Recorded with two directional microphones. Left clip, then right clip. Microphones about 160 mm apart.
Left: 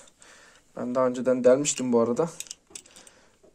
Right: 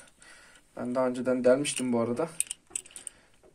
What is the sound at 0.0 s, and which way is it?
Speech, 40° left (ahead or behind).